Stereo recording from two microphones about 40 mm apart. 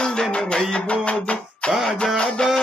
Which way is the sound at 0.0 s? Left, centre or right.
Centre.